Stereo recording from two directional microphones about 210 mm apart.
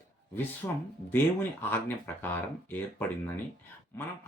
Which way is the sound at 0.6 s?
15° left (ahead or behind).